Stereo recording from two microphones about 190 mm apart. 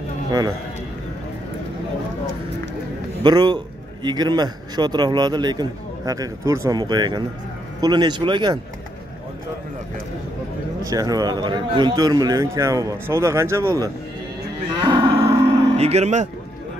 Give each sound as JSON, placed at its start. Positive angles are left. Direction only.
{"t": 0.3, "sound": "a man's voice", "side_deg": -20}
{"t": 3.3, "sound": "a man's voice", "side_deg": -20}
{"t": 10.8, "sound": "a man's voice", "side_deg": -20}
{"t": 14.8, "sound": "livestock", "side_deg": -25}
{"t": 15.7, "sound": "cattle", "side_deg": -35}